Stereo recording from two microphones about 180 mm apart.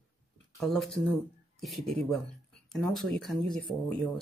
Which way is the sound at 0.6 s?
Centre (ahead or behind).